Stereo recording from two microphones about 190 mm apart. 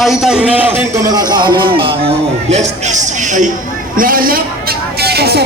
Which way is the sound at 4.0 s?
45° right (ahead or behind).